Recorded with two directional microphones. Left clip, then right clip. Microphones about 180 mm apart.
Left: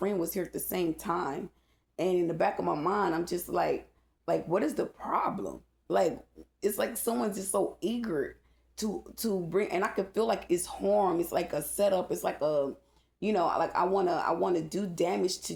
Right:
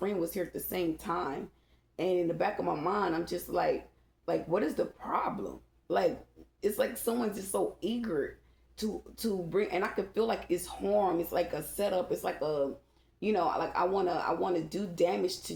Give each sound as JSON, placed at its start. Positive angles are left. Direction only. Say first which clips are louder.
{"t": 0.0, "sound": "speech", "louder": "left 1 dB", "side_deg": 45}